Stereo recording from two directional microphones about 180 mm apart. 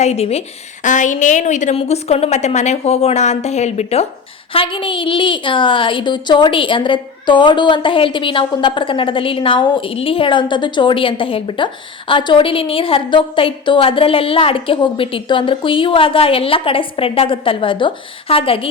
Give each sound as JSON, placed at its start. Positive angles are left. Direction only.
{"t": 0.0, "sound": "a woman's voice", "side_deg": 35}